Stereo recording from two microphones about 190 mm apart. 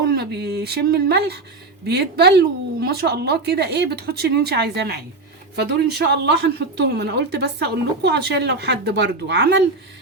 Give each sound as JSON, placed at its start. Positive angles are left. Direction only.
{"t": 0.0, "sound": "speech", "side_deg": -60}